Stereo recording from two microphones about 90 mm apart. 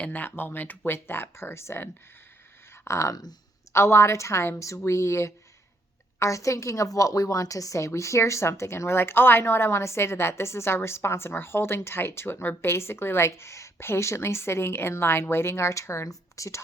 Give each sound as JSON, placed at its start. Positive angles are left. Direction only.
{"t": 0.0, "sound": "a woman's voice", "side_deg": 20}